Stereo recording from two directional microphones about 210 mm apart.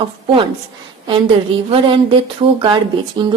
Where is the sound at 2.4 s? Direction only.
25° right (ahead or behind).